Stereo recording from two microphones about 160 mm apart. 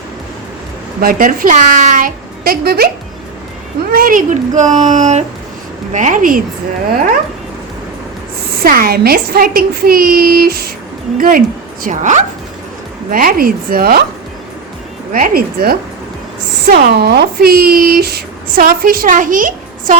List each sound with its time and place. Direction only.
1.0 s a woman's voice: 60° right (ahead or behind)
3.9 s speech: 55° right (ahead or behind)
8.6 s speech: 65° right (ahead or behind)
11.2 s a woman's voice: 60° right (ahead or behind)
15.1 s speech: 65° right (ahead or behind)
16.6 s speech: 80° right; by 20.0 s 55° right (ahead or behind)